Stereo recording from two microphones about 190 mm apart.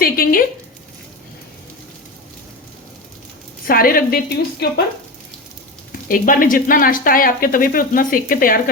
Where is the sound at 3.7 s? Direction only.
50° left (ahead or behind).